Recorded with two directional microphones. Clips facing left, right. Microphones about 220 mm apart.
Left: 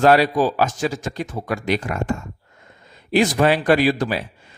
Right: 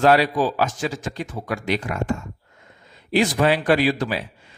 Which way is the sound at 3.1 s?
45° left (ahead or behind).